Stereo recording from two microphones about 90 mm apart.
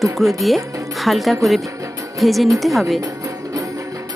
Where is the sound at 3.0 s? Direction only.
40° right (ahead or behind).